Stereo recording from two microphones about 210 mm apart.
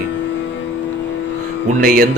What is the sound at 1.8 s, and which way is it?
Speech, 45° right (ahead or behind).